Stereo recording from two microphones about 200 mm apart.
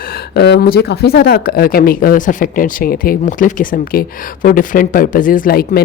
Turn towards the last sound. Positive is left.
turn(degrees=50)  # may be behind; listen again after turning